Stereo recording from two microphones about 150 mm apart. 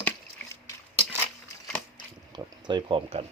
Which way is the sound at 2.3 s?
30° right (ahead or behind).